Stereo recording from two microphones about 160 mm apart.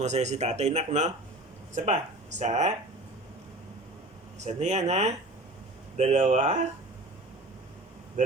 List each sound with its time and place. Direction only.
0.0 s speech: 45° right (ahead or behind)
4.4 s speech: 45° right (ahead or behind)